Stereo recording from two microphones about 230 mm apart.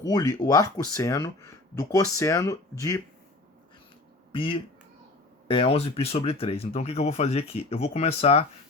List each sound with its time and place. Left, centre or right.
0.0 s speech: centre
4.3 s speech: left